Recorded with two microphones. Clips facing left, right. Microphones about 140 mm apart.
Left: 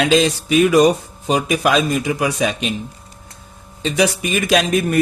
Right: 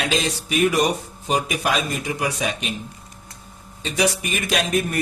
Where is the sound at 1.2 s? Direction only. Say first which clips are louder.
Left 5 dB; 90° left.